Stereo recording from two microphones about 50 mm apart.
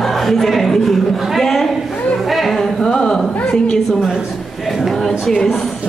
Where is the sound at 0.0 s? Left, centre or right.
Centre.